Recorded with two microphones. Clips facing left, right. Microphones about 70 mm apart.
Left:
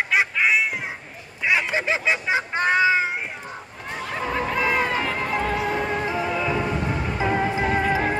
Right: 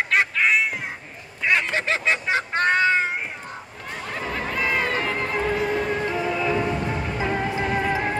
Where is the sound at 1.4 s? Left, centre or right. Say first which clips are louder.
Even; centre.